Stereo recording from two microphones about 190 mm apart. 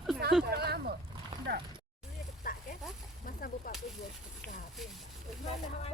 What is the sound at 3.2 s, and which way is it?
Whip, 50° left (ahead or behind).